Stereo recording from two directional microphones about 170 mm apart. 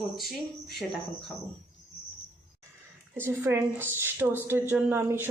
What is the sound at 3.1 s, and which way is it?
A woman's voice, 15° right (ahead or behind).